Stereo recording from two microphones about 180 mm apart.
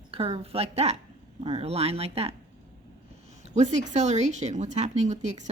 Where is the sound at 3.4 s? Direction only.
40° right (ahead or behind).